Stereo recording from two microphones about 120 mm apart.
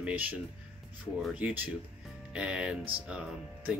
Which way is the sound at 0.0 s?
15° right (ahead or behind).